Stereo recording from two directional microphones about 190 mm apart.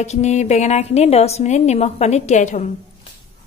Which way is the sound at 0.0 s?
35° left (ahead or behind).